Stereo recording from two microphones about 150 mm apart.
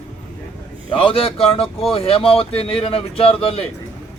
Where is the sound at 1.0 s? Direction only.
40° left (ahead or behind).